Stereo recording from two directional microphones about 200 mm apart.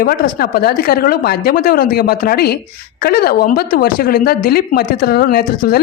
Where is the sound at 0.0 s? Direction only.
45° left (ahead or behind).